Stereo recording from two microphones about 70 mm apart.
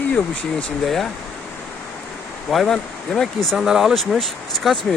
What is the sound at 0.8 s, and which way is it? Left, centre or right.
Speech, centre.